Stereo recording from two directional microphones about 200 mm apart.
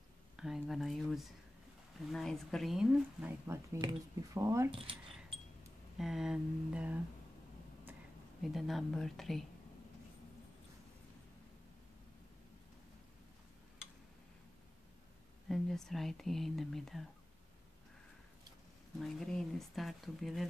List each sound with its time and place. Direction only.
0.4 s speech: centre (ahead or behind)
3.7 s speech: 20° right (ahead or behind)
4.6 s speech: 25° right (ahead or behind)
5.9 s speech: centre (ahead or behind)
8.4 s speech: centre (ahead or behind)
15.4 s speech: centre (ahead or behind)
18.9 s speech: centre (ahead or behind)